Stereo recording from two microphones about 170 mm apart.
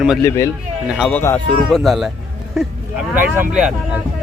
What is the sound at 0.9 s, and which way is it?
Speech, 5° right (ahead or behind).